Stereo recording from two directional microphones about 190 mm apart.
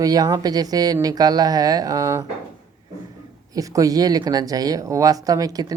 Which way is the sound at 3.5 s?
20° right (ahead or behind).